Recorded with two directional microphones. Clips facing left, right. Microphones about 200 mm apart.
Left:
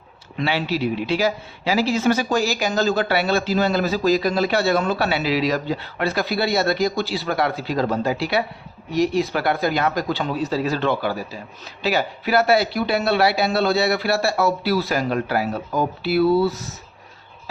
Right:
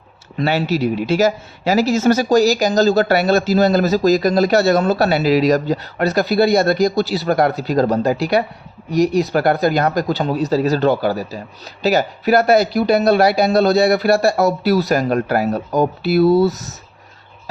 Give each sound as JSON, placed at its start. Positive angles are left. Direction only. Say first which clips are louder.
{"t": 0.3, "sound": "speech", "louder": "right 5 dB", "side_deg": -45}